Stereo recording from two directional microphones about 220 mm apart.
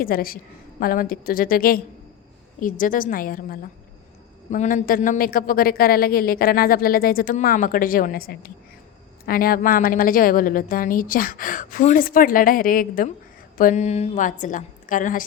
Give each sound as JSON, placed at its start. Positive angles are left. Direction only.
{"t": 0.0, "sound": "a woman's voice", "side_deg": 40}